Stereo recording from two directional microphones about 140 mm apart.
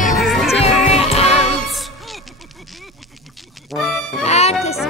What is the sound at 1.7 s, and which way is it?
Music, centre (ahead or behind).